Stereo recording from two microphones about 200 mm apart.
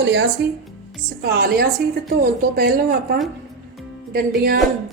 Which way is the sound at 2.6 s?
50° right (ahead or behind).